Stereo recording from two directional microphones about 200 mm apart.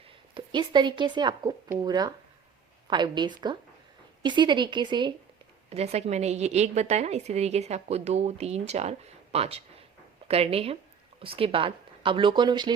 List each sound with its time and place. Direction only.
0.3 s a woman's voice: 25° right (ahead or behind)